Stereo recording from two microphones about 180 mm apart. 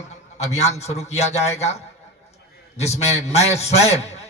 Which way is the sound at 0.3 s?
40° left (ahead or behind).